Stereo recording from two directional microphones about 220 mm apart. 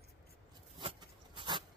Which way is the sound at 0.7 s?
20° right (ahead or behind).